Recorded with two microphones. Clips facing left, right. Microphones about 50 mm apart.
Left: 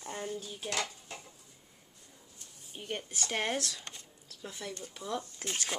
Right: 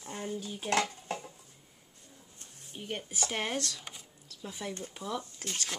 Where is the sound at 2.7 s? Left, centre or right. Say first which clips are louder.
Even; centre.